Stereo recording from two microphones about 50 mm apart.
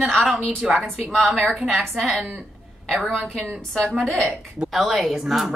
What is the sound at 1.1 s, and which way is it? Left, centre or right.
Speech, centre.